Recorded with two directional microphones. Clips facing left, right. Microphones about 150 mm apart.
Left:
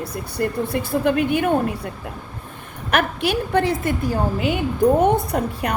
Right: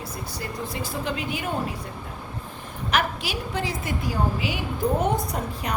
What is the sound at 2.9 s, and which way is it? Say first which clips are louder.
A woman's voice: left 6 dB; 55° left (ahead or behind).